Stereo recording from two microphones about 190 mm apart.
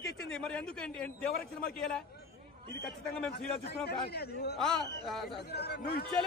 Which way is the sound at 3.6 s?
60° left (ahead or behind).